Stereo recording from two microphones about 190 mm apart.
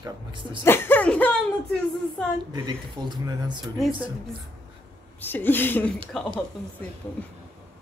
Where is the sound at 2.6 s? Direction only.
25° right (ahead or behind).